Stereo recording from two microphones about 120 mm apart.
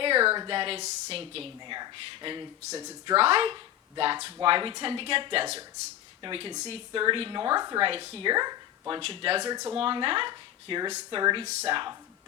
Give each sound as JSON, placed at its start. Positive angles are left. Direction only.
{"t": 0.0, "sound": "a sound", "side_deg": -50}
{"t": 0.3, "sound": "speech", "side_deg": -45}
{"t": 0.8, "sound": "speech", "side_deg": -60}
{"t": 3.2, "sound": "a woman's voice", "side_deg": -55}
{"t": 7.8, "sound": "speech", "side_deg": -50}
{"t": 8.3, "sound": "a woman's voice", "side_deg": -35}
{"t": 8.9, "sound": "speech", "side_deg": -50}
{"t": 9.5, "sound": "a woman's voice", "side_deg": -35}
{"t": 9.7, "sound": "speech", "side_deg": -45}